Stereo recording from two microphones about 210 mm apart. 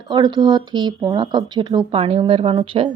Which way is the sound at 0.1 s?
20° right (ahead or behind).